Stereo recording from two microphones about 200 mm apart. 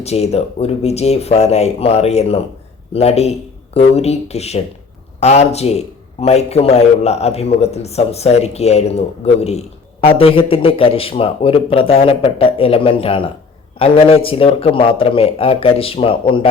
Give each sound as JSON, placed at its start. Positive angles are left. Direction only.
{"t": 0.0, "sound": "a man's voice", "side_deg": 30}